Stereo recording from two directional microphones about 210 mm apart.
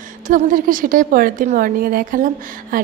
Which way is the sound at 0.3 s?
40° right (ahead or behind).